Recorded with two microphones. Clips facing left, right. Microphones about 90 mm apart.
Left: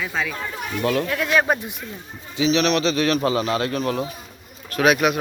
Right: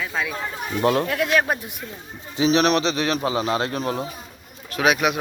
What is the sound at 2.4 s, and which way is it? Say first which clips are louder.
Speech: right 1 dB; 40° right (ahead or behind).